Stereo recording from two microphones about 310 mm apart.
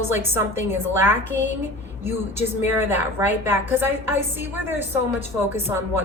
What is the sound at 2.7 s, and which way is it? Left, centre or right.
A woman's voice, centre.